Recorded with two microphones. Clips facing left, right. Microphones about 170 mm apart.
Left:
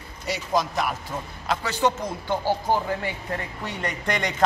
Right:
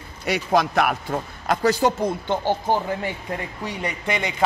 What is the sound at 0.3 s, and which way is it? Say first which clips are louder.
Speech: right 5 dB; 65° right (ahead or behind).